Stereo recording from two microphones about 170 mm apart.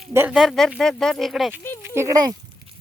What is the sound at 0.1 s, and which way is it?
Speech, 15° right (ahead or behind).